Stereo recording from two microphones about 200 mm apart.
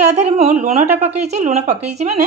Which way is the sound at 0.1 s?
35° right (ahead or behind).